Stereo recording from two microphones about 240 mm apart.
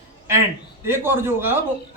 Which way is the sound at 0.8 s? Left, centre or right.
Centre.